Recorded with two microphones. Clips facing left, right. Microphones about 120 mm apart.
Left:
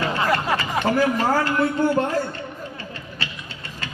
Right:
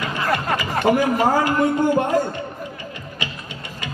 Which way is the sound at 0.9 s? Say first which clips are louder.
Right 3 dB; 15° right (ahead or behind).